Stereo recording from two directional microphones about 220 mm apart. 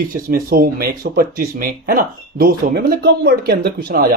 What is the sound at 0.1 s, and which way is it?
Speech, 40° right (ahead or behind).